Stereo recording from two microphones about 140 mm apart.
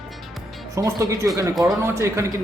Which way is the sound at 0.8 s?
25° right (ahead or behind).